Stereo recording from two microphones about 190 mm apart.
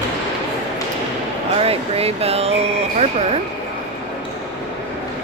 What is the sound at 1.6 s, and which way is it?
Speech, 30° right (ahead or behind).